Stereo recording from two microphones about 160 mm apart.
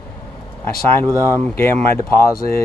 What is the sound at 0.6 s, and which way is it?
Speech, 15° left (ahead or behind).